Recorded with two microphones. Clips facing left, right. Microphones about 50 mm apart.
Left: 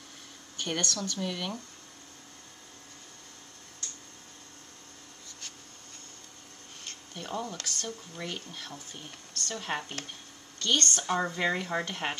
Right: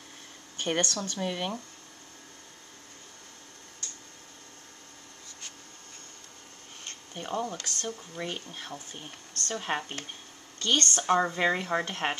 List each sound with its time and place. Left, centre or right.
0.6 s speech: right
7.2 s speech: right
11.1 s speech: centre